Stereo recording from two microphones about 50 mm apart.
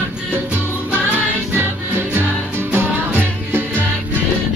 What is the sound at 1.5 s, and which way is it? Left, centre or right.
Music, right.